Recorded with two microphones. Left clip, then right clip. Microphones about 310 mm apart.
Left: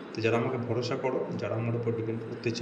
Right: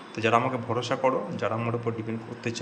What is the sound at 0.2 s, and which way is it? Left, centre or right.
A man's voice, centre.